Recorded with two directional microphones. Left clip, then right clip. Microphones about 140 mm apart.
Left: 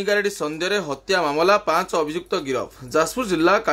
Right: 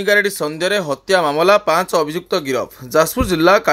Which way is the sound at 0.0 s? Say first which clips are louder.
Right 6 dB; 25° right (ahead or behind).